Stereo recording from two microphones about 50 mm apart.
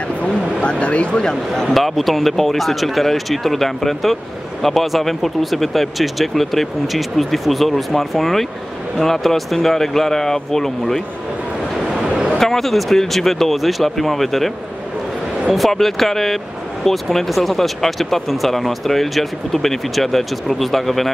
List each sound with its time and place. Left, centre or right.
0.2 s speech: left
1.6 s speech: centre
11.9 s a sound: centre
12.4 s speech: centre
15.5 s speech: centre